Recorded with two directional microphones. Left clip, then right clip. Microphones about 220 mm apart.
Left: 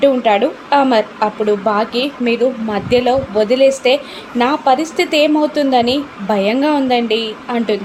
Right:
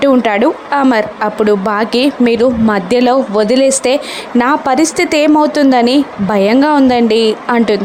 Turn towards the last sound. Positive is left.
turn(degrees=-35)  # may be behind; listen again after turning